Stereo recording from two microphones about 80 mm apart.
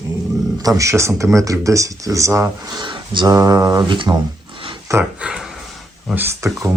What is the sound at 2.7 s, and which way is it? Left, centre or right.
Speech, right.